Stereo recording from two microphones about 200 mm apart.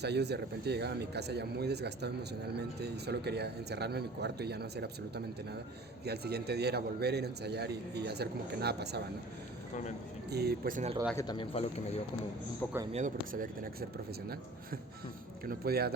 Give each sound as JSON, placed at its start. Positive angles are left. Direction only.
{"t": 0.0, "sound": "a man's voice", "side_deg": -55}
{"t": 10.2, "sound": "speech", "side_deg": -55}
{"t": 11.2, "sound": "speech", "side_deg": 20}
{"t": 12.9, "sound": "speech", "side_deg": -40}
{"t": 15.4, "sound": "speech", "side_deg": -50}